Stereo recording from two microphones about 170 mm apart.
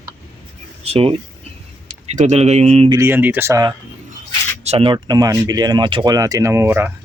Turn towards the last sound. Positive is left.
turn(degrees=-15)  # may be behind; listen again after turning